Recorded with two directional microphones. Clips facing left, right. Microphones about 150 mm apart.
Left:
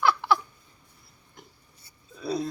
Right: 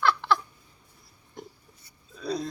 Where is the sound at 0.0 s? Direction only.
10° left (ahead or behind).